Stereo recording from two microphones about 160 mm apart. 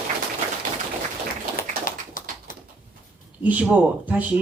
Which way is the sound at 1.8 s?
55° left (ahead or behind).